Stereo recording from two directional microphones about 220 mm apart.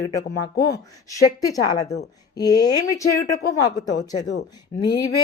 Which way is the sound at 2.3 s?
20° left (ahead or behind).